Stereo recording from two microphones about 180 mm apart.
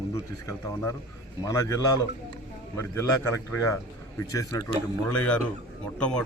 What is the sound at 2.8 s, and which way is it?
Speech, 15° left (ahead or behind).